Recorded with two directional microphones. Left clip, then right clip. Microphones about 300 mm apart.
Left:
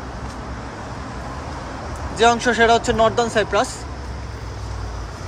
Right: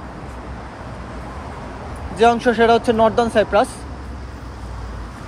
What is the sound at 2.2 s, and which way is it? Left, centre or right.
Speech, centre.